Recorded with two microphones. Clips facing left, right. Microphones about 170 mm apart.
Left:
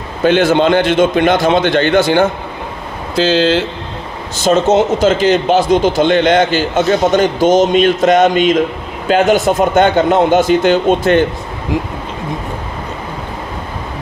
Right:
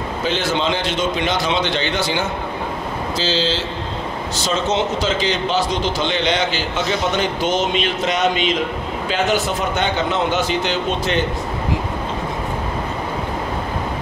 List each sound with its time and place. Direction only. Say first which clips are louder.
0.2 s a man's voice: left 11 dB; 55° left (ahead or behind)